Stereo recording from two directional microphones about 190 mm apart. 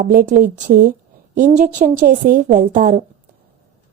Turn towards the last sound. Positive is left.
turn(degrees=-45)  # may be behind; listen again after turning